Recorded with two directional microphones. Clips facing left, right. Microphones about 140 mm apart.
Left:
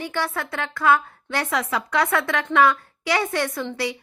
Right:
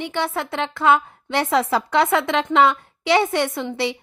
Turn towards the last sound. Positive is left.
turn(degrees=-25)  # may be behind; listen again after turning